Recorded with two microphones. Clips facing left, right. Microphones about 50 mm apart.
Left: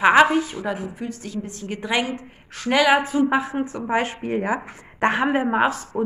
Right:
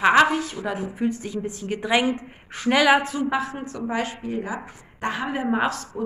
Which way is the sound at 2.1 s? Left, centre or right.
Centre.